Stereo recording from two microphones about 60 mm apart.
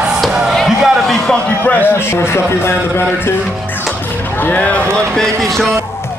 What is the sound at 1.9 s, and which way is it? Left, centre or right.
Speech, left.